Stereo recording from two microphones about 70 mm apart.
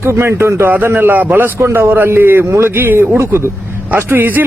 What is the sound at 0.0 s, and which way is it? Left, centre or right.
A man's voice, right.